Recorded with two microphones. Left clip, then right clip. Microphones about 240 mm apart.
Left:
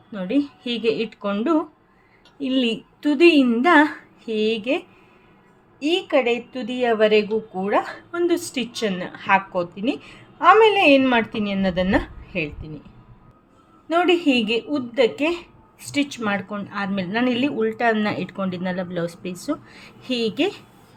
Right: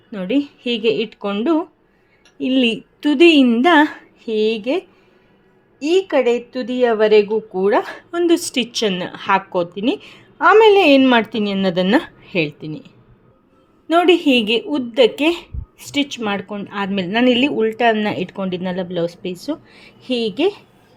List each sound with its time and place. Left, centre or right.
0.1 s a woman's voice: right
5.8 s a woman's voice: right